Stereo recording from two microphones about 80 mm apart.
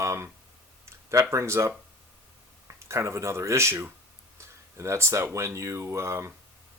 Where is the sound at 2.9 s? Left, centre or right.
Right.